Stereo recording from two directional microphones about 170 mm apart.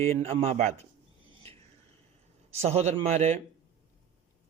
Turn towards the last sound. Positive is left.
turn(degrees=-40)  # may be behind; listen again after turning